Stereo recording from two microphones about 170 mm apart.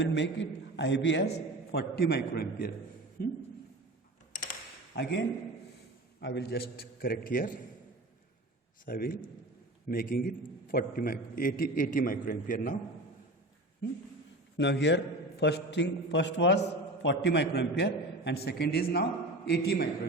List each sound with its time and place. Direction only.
0.0 s a man's voice: 90° left
1.7 s a man's voice: 70° left (ahead or behind)
4.3 s a sound: 50° left (ahead or behind)
4.9 s a man's voice: 85° left
6.1 s a man's voice: 80° left; by 7.6 s 55° left (ahead or behind)
8.9 s a man's voice: 60° left (ahead or behind)
14.6 s a man's voice: 90° left; by 19.9 s 70° left (ahead or behind)